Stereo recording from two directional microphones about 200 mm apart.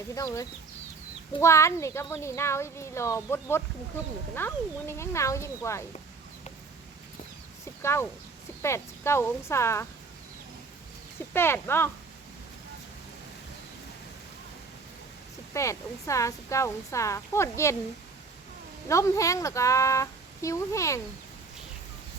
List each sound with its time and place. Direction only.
0.1 s speech: 15° left (ahead or behind)
7.6 s a sound: 15° left (ahead or behind)
8.6 s speech: 15° left (ahead or behind)
11.3 s speech: 10° left (ahead or behind)
15.5 s speech: 15° left (ahead or behind)
18.9 s speech: 15° left (ahead or behind)